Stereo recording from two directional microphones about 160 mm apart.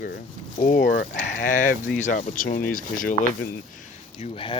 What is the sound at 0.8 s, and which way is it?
Speech, 65° left (ahead or behind).